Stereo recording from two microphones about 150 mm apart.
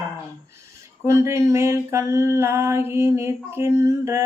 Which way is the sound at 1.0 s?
20° right (ahead or behind).